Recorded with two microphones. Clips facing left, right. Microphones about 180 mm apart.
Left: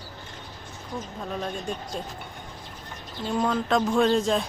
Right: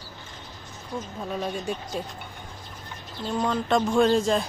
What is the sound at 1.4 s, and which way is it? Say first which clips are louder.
Speech: right 2 dB; 5° right (ahead or behind).